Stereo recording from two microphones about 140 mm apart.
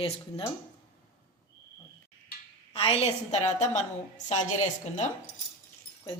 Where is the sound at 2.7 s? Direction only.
45° left (ahead or behind); by 4.4 s 60° left (ahead or behind).